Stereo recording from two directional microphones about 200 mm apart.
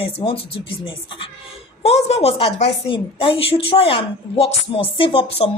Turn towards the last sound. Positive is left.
turn(degrees=25)  # may be behind; listen again after turning